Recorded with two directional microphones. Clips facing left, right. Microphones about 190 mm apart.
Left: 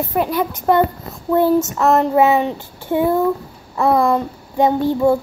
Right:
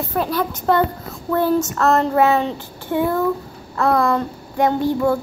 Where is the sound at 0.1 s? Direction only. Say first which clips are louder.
Left 1 dB; 15° left (ahead or behind).